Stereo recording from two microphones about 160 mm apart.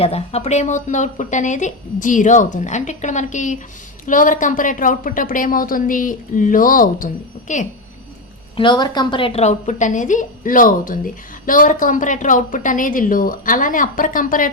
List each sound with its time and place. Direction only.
0.0 s a woman's voice: 40° left (ahead or behind)
8.5 s a woman's voice: 30° left (ahead or behind); by 14.5 s 55° left (ahead or behind)